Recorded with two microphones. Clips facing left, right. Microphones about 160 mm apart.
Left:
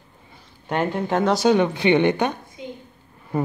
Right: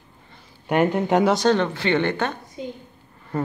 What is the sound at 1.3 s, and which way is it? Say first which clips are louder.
Speech: left 2 dB; 10° left (ahead or behind).